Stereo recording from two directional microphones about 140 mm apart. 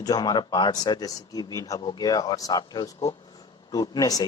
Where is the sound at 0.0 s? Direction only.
30° left (ahead or behind).